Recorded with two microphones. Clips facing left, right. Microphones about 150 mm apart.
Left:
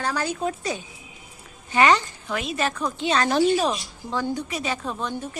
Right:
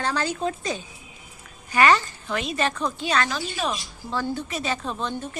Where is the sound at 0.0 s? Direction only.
10° left (ahead or behind).